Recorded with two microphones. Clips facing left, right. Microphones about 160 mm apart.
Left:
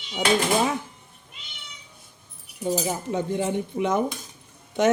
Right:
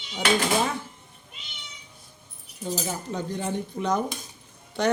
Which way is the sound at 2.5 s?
10° left (ahead or behind).